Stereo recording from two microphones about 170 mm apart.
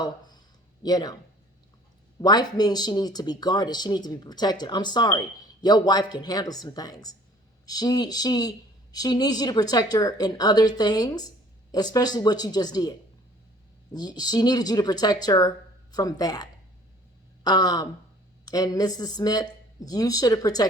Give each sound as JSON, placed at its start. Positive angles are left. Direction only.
{"t": 0.8, "sound": "speech", "side_deg": 25}
{"t": 2.2, "sound": "speech", "side_deg": 25}
{"t": 13.9, "sound": "speech", "side_deg": 25}